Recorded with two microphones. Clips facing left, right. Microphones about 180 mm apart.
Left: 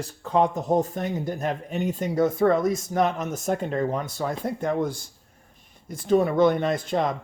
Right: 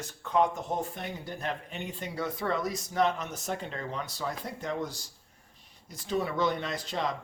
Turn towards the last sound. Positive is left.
turn(degrees=50)  # may be behind; listen again after turning